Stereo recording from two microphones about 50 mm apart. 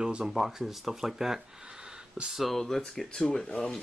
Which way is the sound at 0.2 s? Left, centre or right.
Centre.